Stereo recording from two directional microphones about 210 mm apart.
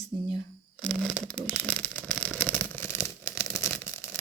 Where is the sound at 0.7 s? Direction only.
5° left (ahead or behind).